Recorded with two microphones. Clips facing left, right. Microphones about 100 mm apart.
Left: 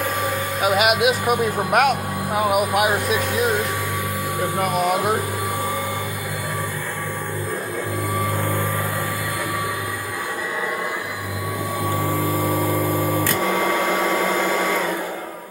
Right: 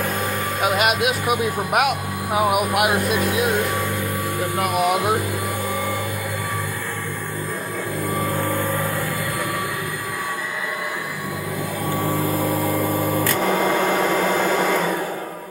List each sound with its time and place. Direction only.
0.6 s speech: 5° left (ahead or behind)
4.6 s speech: 5° right (ahead or behind)
13.9 s printer: centre (ahead or behind)